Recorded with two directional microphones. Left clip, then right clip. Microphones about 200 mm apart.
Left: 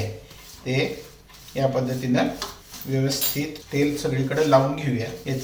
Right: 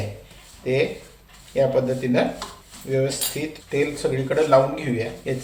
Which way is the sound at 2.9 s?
35° right (ahead or behind).